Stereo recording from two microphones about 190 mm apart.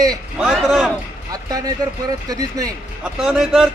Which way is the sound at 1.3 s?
20° right (ahead or behind).